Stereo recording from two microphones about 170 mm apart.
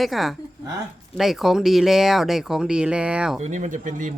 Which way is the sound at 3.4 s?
45° right (ahead or behind).